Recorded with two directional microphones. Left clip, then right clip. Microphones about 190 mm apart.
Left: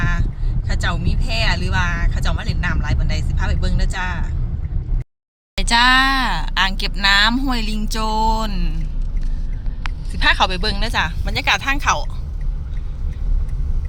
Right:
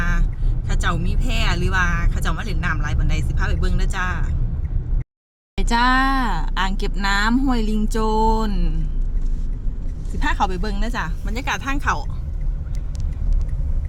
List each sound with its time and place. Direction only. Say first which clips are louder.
0.0 s vehicle: left 2 dB; 15° right (ahead or behind)
0.7 s speech: left 1 dB; 15° right (ahead or behind)
5.5 s speech: left 4 dB; 15° right (ahead or behind)
10.2 s speech: left 6 dB; 5° right (ahead or behind)